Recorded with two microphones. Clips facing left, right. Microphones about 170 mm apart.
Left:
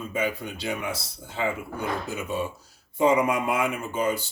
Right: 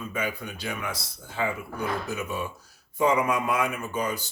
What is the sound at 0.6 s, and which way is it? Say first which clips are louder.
Speech: left 3 dB; 25° left (ahead or behind).